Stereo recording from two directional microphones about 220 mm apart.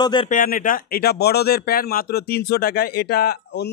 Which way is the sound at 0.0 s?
20° left (ahead or behind).